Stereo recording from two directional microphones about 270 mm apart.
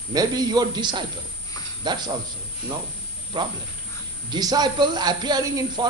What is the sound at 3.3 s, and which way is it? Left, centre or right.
Speech, centre.